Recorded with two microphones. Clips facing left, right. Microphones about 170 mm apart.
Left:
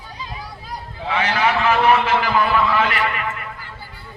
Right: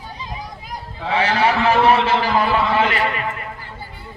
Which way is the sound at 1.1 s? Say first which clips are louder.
Right 2 dB; 35° right (ahead or behind).